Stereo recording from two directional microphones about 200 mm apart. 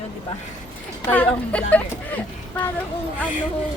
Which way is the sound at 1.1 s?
5° left (ahead or behind).